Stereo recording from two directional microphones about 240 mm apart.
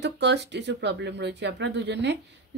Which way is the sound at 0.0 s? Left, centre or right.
Right.